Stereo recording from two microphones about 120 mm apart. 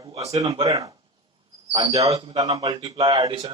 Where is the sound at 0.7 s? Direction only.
30° right (ahead or behind).